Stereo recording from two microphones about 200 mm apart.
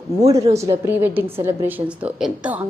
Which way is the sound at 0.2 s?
15° right (ahead or behind).